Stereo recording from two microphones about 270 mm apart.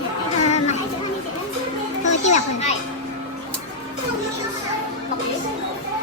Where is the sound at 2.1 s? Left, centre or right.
Left.